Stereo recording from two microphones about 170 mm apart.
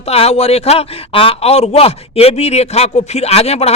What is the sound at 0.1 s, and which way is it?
Speech, 35° left (ahead or behind).